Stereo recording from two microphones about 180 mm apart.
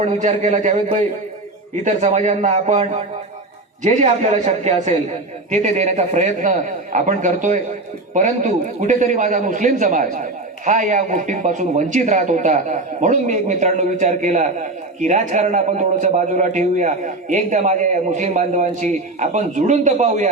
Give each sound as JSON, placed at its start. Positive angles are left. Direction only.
{"t": 0.0, "sound": "a man's voice", "side_deg": -40}